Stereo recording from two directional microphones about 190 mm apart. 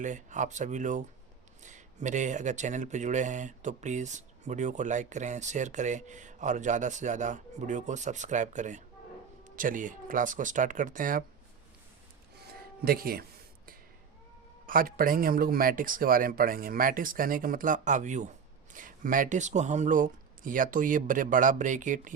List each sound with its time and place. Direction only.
0.0 s speech: 40° right (ahead or behind)
12.8 s speech: 50° right (ahead or behind)
14.7 s speech: 50° right (ahead or behind)